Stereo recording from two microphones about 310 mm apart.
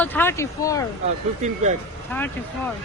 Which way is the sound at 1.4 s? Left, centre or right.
Right.